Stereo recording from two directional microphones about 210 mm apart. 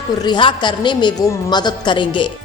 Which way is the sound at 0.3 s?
20° left (ahead or behind).